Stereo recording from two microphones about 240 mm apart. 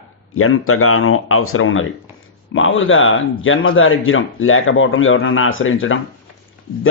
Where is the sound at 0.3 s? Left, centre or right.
Left.